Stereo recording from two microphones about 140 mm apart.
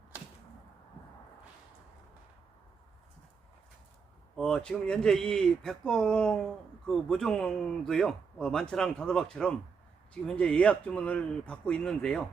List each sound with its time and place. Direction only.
4.4 s speech: 5° left (ahead or behind)